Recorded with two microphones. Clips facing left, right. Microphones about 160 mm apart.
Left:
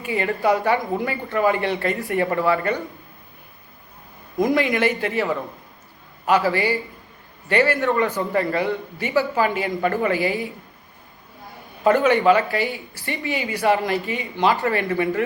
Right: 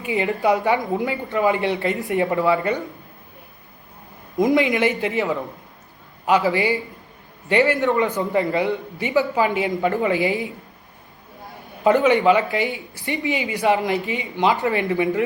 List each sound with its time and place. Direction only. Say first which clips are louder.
0.0 s speech: right 1 dB; 20° right (ahead or behind)
4.4 s speech: right 2 dB; 20° right (ahead or behind)
11.8 s speech: right 1 dB; 20° right (ahead or behind)